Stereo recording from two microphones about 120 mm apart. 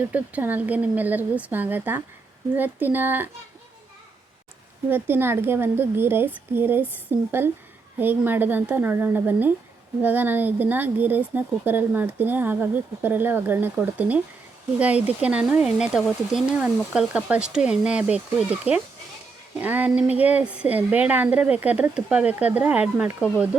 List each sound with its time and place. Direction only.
0.0 s speech: 15° right (ahead or behind)
4.9 s speech: 15° right (ahead or behind)